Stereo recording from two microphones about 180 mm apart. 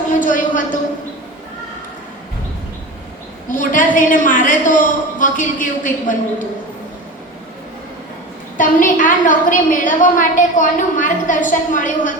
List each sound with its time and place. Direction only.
0.2 s a woman's voice: 45° left (ahead or behind)
3.5 s a sound: 45° left (ahead or behind)
3.9 s a woman's voice: 45° left (ahead or behind)
8.5 s a woman's voice: 45° left (ahead or behind)